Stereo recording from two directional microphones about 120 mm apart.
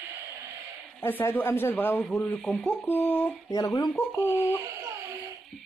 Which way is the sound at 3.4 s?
30° left (ahead or behind).